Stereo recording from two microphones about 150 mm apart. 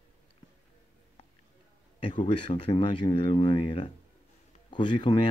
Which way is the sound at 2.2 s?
35° left (ahead or behind).